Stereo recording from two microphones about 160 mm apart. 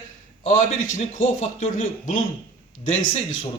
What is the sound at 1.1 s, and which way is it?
Speech, 50° left (ahead or behind).